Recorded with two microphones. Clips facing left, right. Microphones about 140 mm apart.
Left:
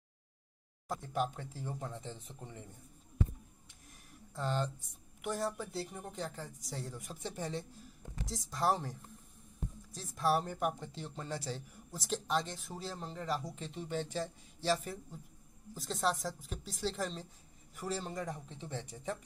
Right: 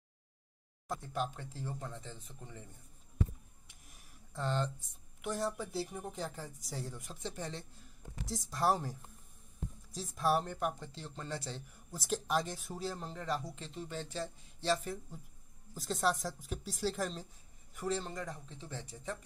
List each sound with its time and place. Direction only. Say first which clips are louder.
1.0 s speech: left 3 dB; 10° left (ahead or behind)
4.3 s speech: even; 10° left (ahead or behind)
7.2 s speech: left 2 dB; 10° left (ahead or behind)
8.3 s speech: right 1 dB; centre (ahead or behind)
9.9 s speech: even; centre (ahead or behind)
11.4 s speech: left 3 dB; centre (ahead or behind)
13.7 s speech: left 3 dB; 15° left (ahead or behind)